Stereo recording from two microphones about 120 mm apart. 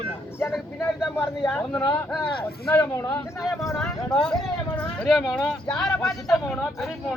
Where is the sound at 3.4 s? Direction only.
Centre (ahead or behind).